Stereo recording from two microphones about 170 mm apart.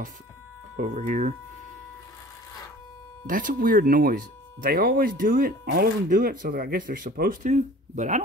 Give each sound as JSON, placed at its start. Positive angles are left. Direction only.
{"t": 0.7, "sound": "speech", "side_deg": -50}
{"t": 3.3, "sound": "speech", "side_deg": -55}